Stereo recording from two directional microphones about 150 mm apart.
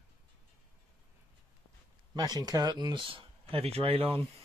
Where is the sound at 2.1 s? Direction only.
25° right (ahead or behind).